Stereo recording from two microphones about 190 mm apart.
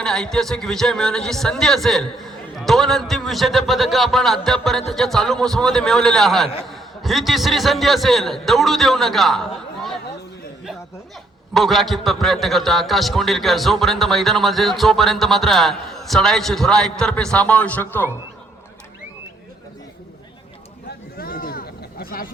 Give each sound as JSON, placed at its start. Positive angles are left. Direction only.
{"t": 0.0, "sound": "a man's voice", "side_deg": 5}
{"t": 11.5, "sound": "a man's voice", "side_deg": 0}
{"t": 21.2, "sound": "a sound", "side_deg": 50}